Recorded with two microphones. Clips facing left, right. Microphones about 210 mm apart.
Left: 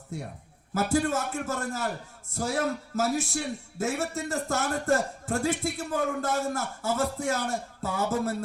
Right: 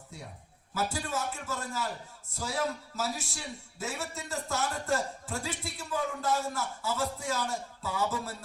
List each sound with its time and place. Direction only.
0.1 s a man's voice: 50° left (ahead or behind)